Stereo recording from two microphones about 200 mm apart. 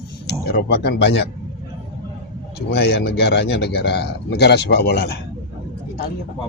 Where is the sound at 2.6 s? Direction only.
55° left (ahead or behind).